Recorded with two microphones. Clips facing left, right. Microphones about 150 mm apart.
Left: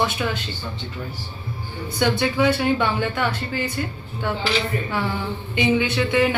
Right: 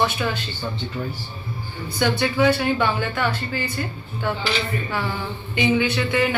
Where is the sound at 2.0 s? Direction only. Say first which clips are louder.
Even; 20° left (ahead or behind).